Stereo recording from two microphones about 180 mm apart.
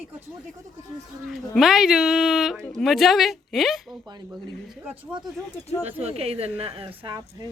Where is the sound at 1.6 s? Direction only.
Centre (ahead or behind).